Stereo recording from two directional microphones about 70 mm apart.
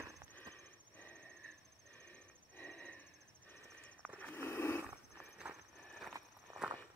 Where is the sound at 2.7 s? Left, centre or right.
Centre.